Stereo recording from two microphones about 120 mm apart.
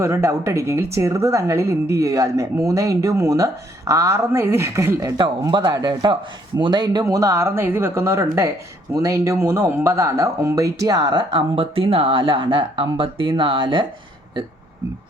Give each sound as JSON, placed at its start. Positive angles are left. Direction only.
{"t": 0.0, "sound": "speech", "side_deg": -25}